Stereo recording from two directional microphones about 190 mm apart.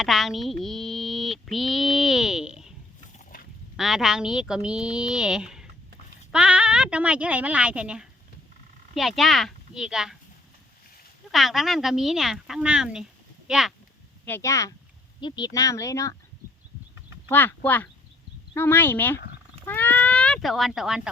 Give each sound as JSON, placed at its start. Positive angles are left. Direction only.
{"t": 0.0, "sound": "speech", "side_deg": 0}
{"t": 3.8, "sound": "a woman's voice", "side_deg": 0}
{"t": 11.3, "sound": "a woman's voice", "side_deg": 0}
{"t": 14.3, "sound": "speech", "side_deg": 15}
{"t": 17.2, "sound": "speech", "side_deg": 10}